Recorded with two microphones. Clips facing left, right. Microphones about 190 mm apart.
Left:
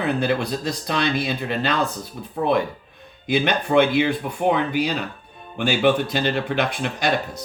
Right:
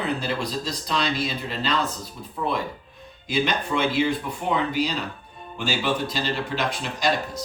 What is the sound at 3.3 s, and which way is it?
Speech, 60° left (ahead or behind).